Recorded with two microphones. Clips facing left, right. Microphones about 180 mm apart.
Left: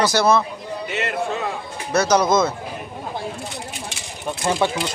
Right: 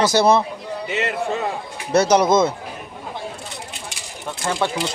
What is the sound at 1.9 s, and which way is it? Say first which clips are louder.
Speech: right 2 dB; 30° right (ahead or behind).